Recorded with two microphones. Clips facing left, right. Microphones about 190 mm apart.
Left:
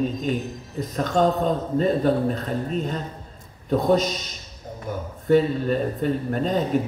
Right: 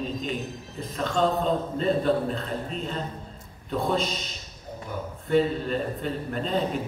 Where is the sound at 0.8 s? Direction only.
45° left (ahead or behind).